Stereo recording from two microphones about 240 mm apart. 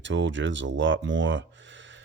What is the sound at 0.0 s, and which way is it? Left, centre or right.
Speech, right.